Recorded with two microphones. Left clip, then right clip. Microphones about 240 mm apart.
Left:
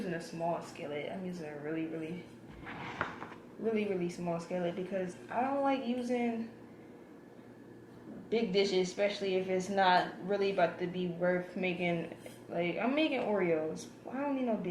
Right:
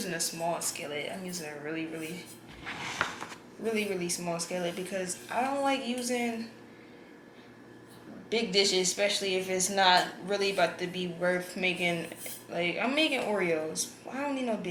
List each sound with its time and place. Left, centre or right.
0.0 s speech: centre
3.6 s speech: centre
8.3 s speech: centre